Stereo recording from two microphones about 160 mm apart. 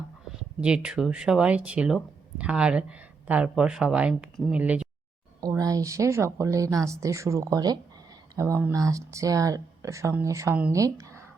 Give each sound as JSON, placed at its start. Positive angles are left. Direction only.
{"t": 0.6, "sound": "speech", "side_deg": -5}
{"t": 5.4, "sound": "speech", "side_deg": -20}